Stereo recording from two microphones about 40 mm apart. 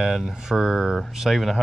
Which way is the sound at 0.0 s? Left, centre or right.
Centre.